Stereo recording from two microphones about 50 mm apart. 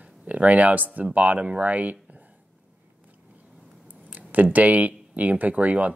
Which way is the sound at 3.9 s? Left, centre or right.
Right.